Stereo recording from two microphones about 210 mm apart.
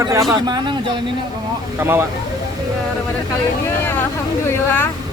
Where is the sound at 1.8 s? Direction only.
10° right (ahead or behind).